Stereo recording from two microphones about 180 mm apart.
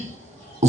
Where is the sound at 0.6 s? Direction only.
40° right (ahead or behind).